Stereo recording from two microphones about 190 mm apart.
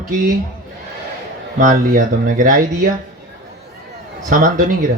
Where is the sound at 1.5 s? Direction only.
45° right (ahead or behind).